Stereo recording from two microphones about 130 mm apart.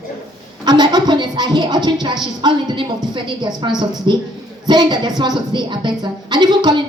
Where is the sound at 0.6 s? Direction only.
35° right (ahead or behind).